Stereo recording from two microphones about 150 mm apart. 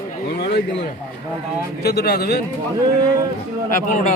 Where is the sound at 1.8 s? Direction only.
90° left.